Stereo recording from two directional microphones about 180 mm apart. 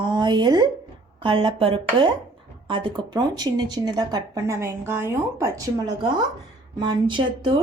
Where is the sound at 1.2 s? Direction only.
30° right (ahead or behind).